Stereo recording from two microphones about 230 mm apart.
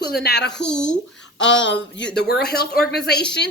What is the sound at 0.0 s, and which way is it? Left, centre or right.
Speech, left.